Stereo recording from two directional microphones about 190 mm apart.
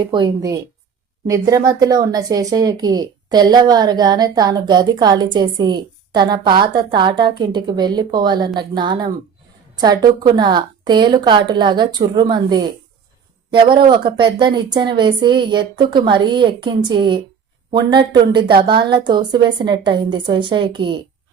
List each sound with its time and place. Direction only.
0.0 s a woman's voice: 25° right (ahead or behind)